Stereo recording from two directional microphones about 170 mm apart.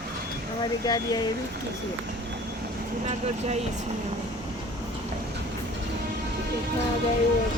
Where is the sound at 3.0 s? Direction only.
40° right (ahead or behind).